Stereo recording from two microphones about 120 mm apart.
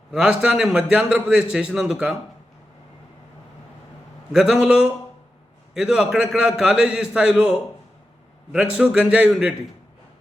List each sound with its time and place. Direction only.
0.1 s a man's voice: 5° right (ahead or behind)
4.3 s a man's voice: 5° right (ahead or behind)
8.8 s a man's voice: 5° right (ahead or behind)